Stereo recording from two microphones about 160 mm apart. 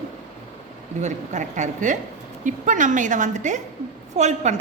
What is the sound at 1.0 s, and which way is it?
A woman's voice, 50° right (ahead or behind).